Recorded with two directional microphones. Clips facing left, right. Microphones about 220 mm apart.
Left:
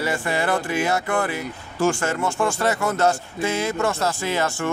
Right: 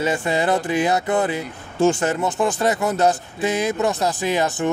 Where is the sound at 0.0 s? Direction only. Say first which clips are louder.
Right 3 dB; 20° right (ahead or behind).